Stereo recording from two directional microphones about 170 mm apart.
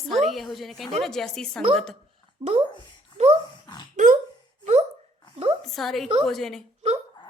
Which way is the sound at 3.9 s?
50° right (ahead or behind).